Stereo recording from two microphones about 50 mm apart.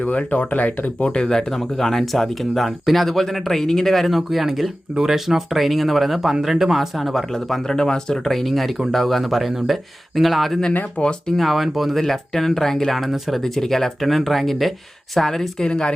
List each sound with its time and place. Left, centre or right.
0.0 s speech: left
1.0 s speech: centre
11.0 s speech: left
11.3 s speech: centre